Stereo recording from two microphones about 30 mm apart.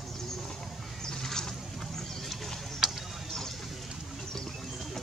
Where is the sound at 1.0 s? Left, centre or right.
Centre.